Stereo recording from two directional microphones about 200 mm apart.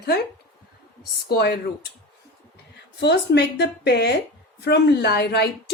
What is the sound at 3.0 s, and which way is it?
A woman's voice, 55° left (ahead or behind).